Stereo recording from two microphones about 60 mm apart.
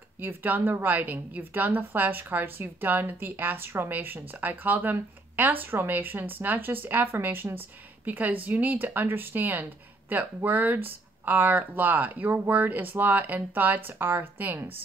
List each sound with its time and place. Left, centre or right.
0.2 s a woman's voice: right